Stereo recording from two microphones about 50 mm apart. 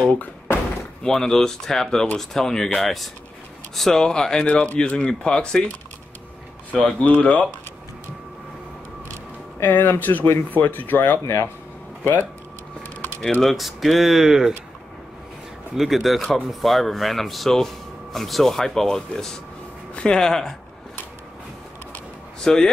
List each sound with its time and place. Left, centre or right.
0.0 s speech: left
1.0 s speech: centre
4.8 s speech: left
6.7 s speech: left
9.6 s speech: left
11.2 s speech: left
12.0 s speech: left
13.4 s speech: centre
15.7 s speech: centre
22.4 s speech: centre